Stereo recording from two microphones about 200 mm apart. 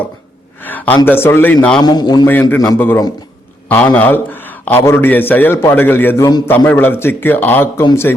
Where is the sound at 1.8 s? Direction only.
20° left (ahead or behind).